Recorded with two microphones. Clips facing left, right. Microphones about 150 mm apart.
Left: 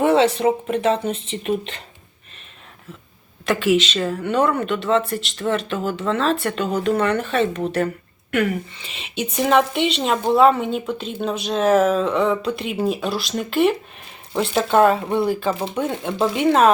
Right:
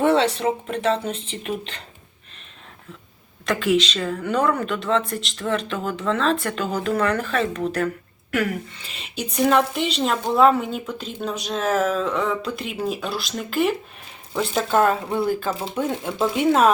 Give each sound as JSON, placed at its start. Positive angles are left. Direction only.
{"t": 0.0, "sound": "a sound", "side_deg": 5}
{"t": 0.3, "sound": "speech", "side_deg": 5}
{"t": 1.1, "sound": "speech", "side_deg": -35}
{"t": 1.5, "sound": "a woman's voice", "side_deg": 0}
{"t": 3.4, "sound": "a woman's voice", "side_deg": 5}
{"t": 6.7, "sound": "speech", "side_deg": 30}
{"t": 7.1, "sound": "a woman's voice", "side_deg": 0}
{"t": 7.4, "sound": "speech", "side_deg": 30}
{"t": 8.3, "sound": "a woman's voice", "side_deg": 0}